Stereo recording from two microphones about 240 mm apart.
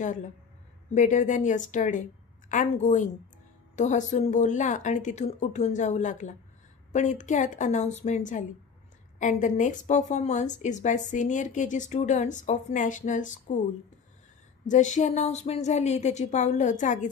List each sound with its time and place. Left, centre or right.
0.9 s a woman's voice: left
14.7 s a woman's voice: left